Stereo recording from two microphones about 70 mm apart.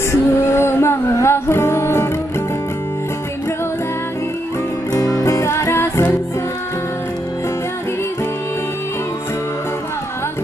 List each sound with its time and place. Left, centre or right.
0.1 s music: left
4.9 s music: left